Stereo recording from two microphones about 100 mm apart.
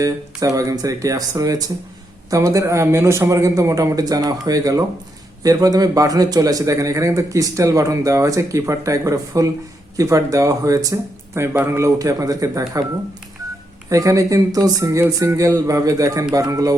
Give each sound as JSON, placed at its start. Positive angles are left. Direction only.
{"t": 0.0, "sound": "a man's voice", "side_deg": -35}
{"t": 11.3, "sound": "speech", "side_deg": -25}
{"t": 11.9, "sound": "a man's voice", "side_deg": -35}
{"t": 13.9, "sound": "a man's voice", "side_deg": -35}